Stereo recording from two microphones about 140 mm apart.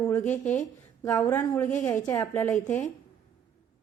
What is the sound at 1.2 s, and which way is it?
A woman's voice, 10° left (ahead or behind).